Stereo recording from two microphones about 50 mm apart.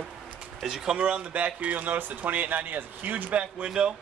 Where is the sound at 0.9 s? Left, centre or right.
Right.